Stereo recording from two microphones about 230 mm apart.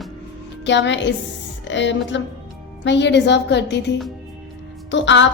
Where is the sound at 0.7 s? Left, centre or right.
Left.